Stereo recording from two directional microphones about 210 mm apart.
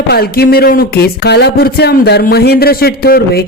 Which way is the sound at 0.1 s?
45° left (ahead or behind).